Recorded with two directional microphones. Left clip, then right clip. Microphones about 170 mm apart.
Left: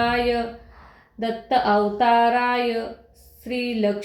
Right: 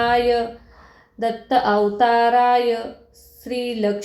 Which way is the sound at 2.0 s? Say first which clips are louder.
Right 3 dB; 35° right (ahead or behind).